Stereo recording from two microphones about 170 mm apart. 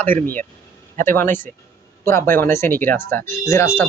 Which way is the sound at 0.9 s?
15° left (ahead or behind).